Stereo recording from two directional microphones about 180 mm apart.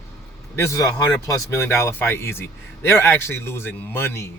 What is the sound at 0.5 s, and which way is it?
A man's voice, 15° left (ahead or behind).